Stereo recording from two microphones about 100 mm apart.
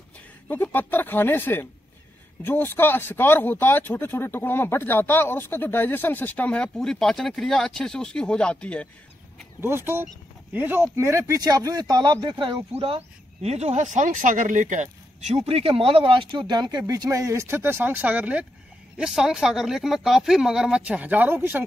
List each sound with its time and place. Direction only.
0.5 s speech: 20° left (ahead or behind)
9.6 s speech: 25° right (ahead or behind)
11.0 s speech: 30° right (ahead or behind); by 12.6 s 50° right (ahead or behind)
12.7 s speech: 80° right
15.3 s speech: 80° right; by 21.6 s 20° right (ahead or behind)